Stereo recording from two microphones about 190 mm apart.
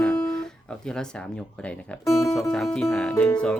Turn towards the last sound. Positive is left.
turn(degrees=5)  # may be behind; listen again after turning